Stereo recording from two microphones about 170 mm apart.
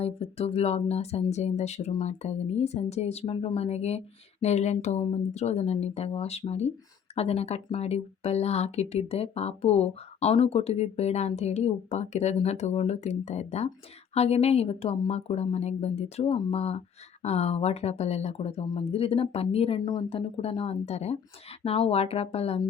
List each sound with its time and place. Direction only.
0.0 s speech: 35° left (ahead or behind)